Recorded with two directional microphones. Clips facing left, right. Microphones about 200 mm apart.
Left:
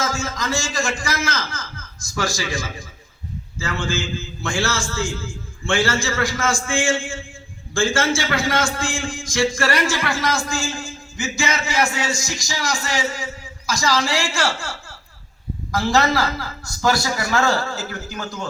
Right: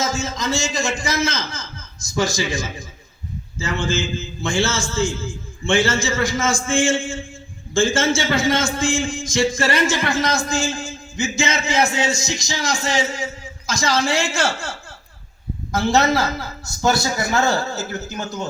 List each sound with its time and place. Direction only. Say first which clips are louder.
0.0 s a man's voice: right 2 dB; 20° right (ahead or behind)